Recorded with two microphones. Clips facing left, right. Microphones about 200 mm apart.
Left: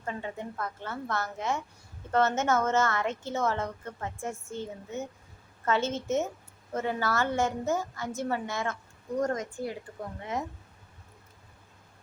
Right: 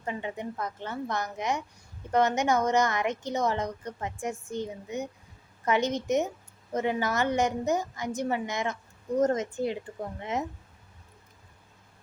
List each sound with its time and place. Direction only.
0.0 s a woman's voice: 15° right (ahead or behind)